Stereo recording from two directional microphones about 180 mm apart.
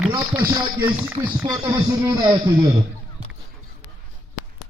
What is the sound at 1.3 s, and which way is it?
A man's voice, 20° right (ahead or behind).